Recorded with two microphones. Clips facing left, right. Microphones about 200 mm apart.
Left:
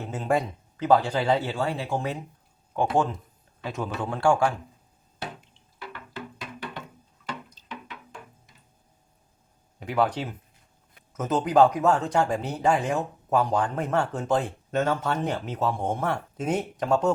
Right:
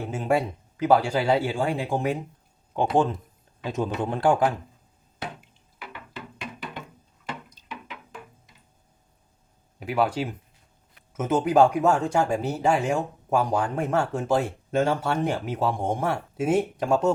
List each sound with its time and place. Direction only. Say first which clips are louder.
0.1 s a man's voice: right 1 dB; 10° right (ahead or behind)
9.8 s speech: right 1 dB; 5° right (ahead or behind)